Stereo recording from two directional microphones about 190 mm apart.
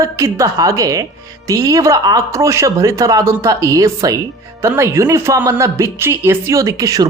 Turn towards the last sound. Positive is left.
turn(degrees=-20)  # may be behind; listen again after turning